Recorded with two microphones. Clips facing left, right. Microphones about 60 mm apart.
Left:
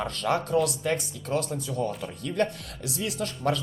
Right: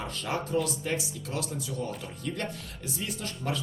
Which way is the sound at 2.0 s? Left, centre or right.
Left.